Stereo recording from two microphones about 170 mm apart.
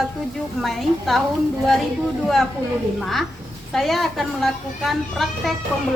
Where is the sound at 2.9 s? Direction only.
Centre (ahead or behind).